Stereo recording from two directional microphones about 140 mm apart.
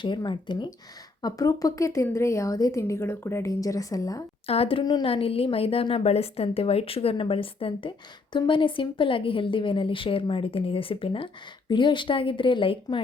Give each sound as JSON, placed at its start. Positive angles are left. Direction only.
{"t": 0.0, "sound": "a woman's voice", "side_deg": 35}
{"t": 4.4, "sound": "a woman's voice", "side_deg": 45}
{"t": 4.8, "sound": "a woman's voice", "side_deg": 30}
{"t": 5.0, "sound": "a woman's voice", "side_deg": 45}